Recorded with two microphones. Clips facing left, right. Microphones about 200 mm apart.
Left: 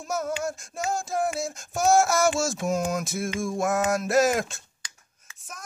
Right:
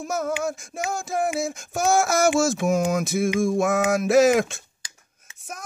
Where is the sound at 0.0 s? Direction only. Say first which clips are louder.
Right 3 dB; 55° right (ahead or behind).